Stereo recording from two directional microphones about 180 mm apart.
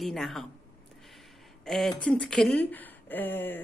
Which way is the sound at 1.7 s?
Centre (ahead or behind).